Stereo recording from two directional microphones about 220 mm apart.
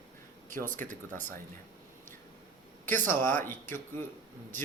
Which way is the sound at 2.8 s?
10° left (ahead or behind).